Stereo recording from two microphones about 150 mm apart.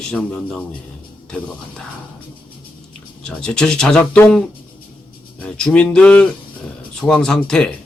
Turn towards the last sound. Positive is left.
turn(degrees=5)  # may be behind; listen again after turning